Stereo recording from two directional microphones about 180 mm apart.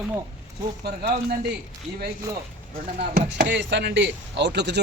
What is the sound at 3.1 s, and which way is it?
Speech, 75° right (ahead or behind).